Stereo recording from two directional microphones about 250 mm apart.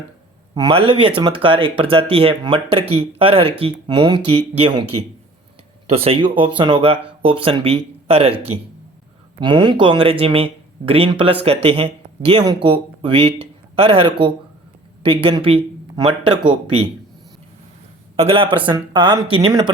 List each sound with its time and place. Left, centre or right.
0.5 s speech: centre
5.9 s speech: right
9.4 s speech: centre
15.0 s speech: right
18.2 s speech: right